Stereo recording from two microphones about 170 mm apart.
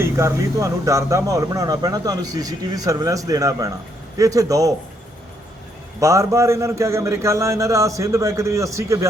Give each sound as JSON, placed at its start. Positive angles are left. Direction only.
{"t": 0.0, "sound": "speech", "side_deg": -15}
{"t": 6.0, "sound": "a man's voice", "side_deg": -20}